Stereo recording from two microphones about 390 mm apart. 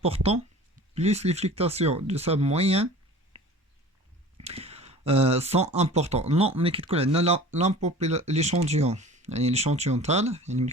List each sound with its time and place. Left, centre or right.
0.0 s speech: centre
4.4 s speech: centre